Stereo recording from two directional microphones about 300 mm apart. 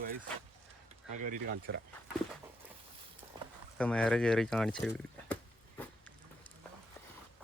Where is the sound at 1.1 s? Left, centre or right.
Right.